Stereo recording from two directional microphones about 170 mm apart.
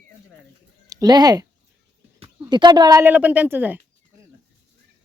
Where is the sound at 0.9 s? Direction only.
25° right (ahead or behind).